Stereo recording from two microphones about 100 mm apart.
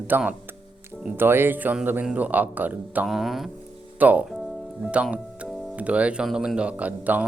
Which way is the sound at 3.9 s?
15° right (ahead or behind).